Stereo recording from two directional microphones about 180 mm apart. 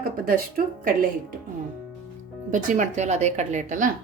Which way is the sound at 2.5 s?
45° right (ahead or behind).